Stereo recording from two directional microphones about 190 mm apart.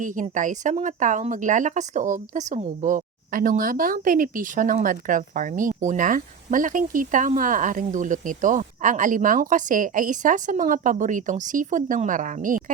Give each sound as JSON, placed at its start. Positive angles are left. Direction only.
{"t": 0.0, "sound": "speech", "side_deg": -45}